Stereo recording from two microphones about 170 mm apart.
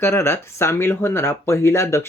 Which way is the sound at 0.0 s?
15° left (ahead or behind).